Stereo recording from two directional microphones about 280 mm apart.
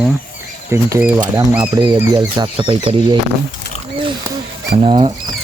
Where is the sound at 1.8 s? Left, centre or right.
Centre.